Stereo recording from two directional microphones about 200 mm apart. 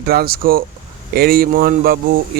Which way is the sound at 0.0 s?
50° right (ahead or behind).